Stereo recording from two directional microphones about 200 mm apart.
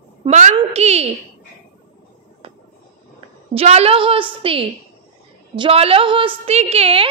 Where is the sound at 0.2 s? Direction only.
35° right (ahead or behind).